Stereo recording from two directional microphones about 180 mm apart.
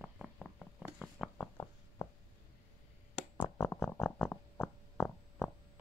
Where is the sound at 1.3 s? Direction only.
15° left (ahead or behind).